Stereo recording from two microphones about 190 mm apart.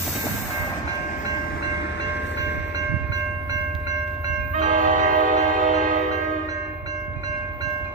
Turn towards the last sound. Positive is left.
turn(degrees=-40)  # may be behind; listen again after turning